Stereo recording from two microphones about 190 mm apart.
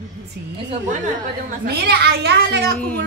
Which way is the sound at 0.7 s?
40° right (ahead or behind).